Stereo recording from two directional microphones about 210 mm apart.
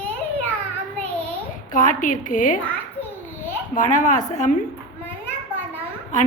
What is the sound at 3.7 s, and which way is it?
Speech, 40° left (ahead or behind).